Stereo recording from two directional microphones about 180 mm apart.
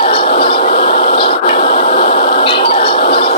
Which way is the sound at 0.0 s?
30° left (ahead or behind).